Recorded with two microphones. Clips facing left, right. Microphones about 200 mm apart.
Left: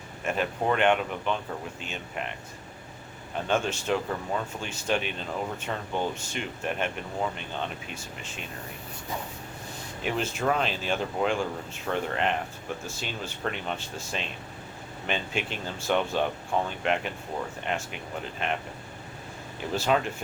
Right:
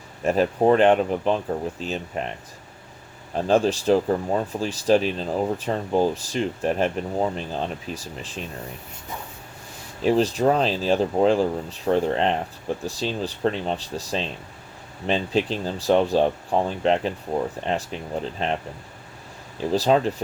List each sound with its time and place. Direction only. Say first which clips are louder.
0.3 s speech: right 9 dB; 35° right (ahead or behind)
3.3 s speech: right 8 dB; 35° right (ahead or behind)
10.0 s speech: right 10 dB; 35° right (ahead or behind)
19.5 s speech: right 6 dB; 35° right (ahead or behind)